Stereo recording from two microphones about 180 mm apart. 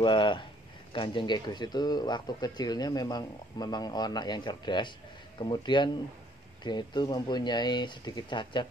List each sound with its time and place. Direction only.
0.0 s speech: 25° left (ahead or behind)